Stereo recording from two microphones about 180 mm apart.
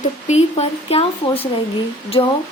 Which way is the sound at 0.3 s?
35° left (ahead or behind).